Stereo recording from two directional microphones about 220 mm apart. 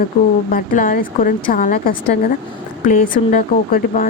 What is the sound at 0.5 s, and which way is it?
Speech, 40° left (ahead or behind).